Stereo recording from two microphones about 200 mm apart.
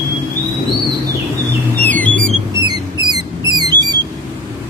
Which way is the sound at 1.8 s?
10° left (ahead or behind).